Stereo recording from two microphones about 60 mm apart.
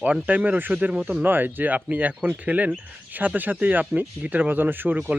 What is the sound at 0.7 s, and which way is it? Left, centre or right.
Speech, centre.